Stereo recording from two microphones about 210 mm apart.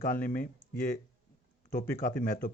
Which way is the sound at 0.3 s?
45° left (ahead or behind).